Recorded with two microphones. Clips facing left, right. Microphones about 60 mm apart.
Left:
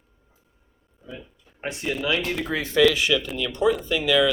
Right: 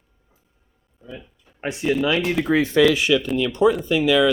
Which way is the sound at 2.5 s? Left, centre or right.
Right.